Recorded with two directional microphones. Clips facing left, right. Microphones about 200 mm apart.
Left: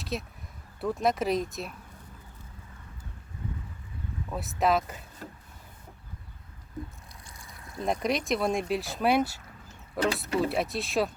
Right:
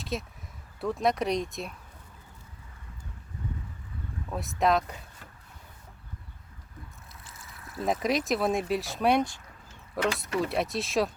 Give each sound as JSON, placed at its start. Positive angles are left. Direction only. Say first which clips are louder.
{"t": 0.0, "sound": "speech", "louder": "even", "side_deg": 0}
{"t": 4.3, "sound": "speech", "louder": "even", "side_deg": 0}
{"t": 7.3, "sound": "speech", "louder": "right 1 dB", "side_deg": -5}
{"t": 10.2, "sound": "speech", "louder": "left 2 dB", "side_deg": 30}
{"t": 10.5, "sound": "speech", "louder": "even", "side_deg": 0}